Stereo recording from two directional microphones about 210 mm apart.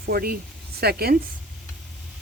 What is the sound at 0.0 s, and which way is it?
Speech, 45° right (ahead or behind).